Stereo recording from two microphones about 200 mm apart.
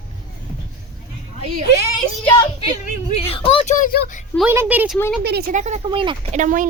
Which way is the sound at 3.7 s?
40° left (ahead or behind).